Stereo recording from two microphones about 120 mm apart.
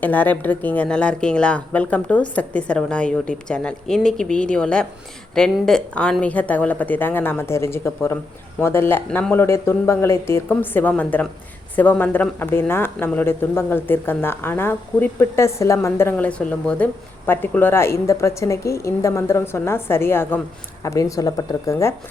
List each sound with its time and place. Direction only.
0.0 s a woman's voice: 15° left (ahead or behind)